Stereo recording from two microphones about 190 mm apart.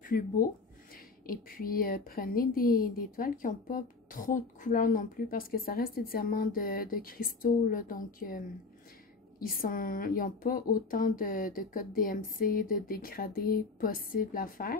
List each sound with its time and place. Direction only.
0.0 s speech: 50° left (ahead or behind)
9.4 s speech: 50° left (ahead or behind)